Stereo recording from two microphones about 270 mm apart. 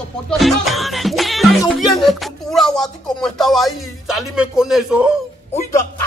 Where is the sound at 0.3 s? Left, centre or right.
Centre.